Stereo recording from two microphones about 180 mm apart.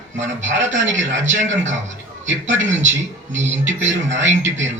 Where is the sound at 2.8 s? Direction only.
90° right.